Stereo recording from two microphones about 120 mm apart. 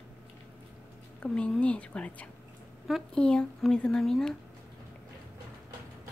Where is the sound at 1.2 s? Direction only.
10° left (ahead or behind).